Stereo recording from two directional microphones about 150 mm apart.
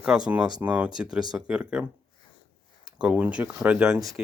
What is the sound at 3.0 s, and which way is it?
Speech, 10° right (ahead or behind).